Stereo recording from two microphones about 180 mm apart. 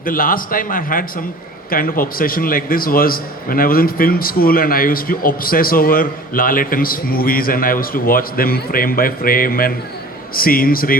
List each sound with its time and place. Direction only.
0.0 s a man's voice: 50° left (ahead or behind)